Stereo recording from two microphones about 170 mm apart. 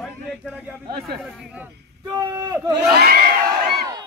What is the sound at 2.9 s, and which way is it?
Crowd, 65° right (ahead or behind).